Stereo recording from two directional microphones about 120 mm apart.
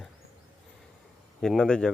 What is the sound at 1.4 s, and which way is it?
Speech, 5° left (ahead or behind).